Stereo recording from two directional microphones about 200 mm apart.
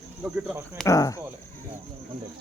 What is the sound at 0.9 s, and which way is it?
Speech, 15° left (ahead or behind).